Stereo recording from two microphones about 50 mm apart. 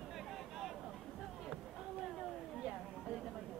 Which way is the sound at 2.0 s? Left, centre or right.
Centre.